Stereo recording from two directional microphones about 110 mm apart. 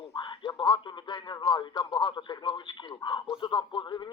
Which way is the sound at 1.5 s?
45° left (ahead or behind).